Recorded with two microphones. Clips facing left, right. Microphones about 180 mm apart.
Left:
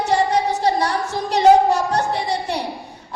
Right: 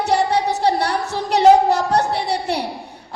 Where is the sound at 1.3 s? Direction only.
70° right (ahead or behind).